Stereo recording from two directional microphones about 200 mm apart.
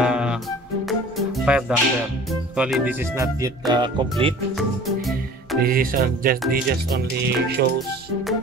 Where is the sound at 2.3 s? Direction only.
5° right (ahead or behind); by 4.3 s 25° right (ahead or behind).